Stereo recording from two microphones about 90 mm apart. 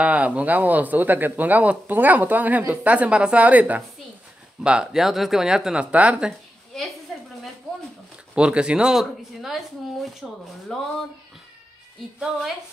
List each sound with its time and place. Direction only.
0.0 s speech: 15° right (ahead or behind)
6.7 s a woman's voice: centre (ahead or behind)
8.4 s speech: 10° right (ahead or behind)
10.7 s speech: 5° left (ahead or behind)